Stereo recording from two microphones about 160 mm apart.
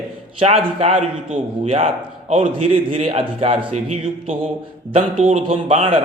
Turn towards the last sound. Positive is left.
turn(degrees=-35)  # may be behind; listen again after turning